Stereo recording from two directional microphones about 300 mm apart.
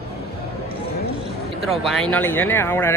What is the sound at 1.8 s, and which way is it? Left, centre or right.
Speech, centre.